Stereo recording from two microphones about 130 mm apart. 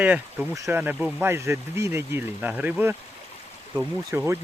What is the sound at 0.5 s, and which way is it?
Speech, 25° right (ahead or behind).